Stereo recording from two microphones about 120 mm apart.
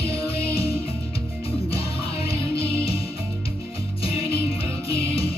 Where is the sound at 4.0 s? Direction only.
50° left (ahead or behind).